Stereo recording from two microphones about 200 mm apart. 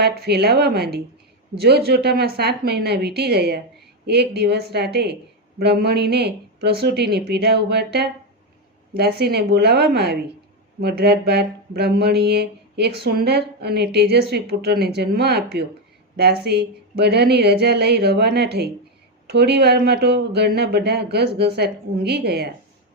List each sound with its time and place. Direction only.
0.0 s speech: 55° right (ahead or behind)